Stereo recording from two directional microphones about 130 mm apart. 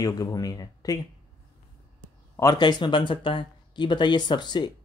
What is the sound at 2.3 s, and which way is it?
Speech, 30° left (ahead or behind).